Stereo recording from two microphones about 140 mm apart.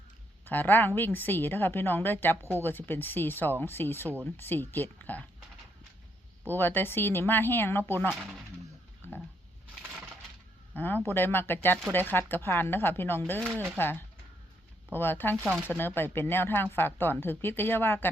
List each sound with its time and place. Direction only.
0.4 s speech: 15° left (ahead or behind)
6.5 s speech: 15° left (ahead or behind)
8.1 s speech: 5° right (ahead or behind)
10.8 s speech: 15° left (ahead or behind)
13.4 s speech: 15° right (ahead or behind)
13.7 s speech: 15° left (ahead or behind)
15.4 s speech: 10° right (ahead or behind)
16.0 s speech: 15° left (ahead or behind)